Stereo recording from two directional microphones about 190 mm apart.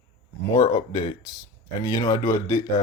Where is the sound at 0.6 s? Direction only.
20° left (ahead or behind).